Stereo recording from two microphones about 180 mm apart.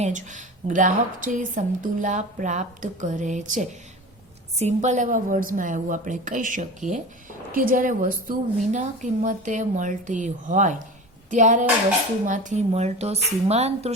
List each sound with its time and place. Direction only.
0.0 s a woman's voice: 45° right (ahead or behind)